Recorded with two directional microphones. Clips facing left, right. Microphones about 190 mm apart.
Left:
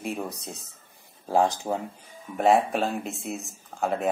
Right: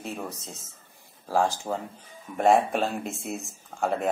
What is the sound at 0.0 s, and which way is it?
Speech, 15° left (ahead or behind).